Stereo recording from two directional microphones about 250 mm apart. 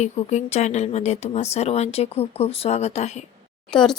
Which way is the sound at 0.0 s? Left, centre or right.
Left.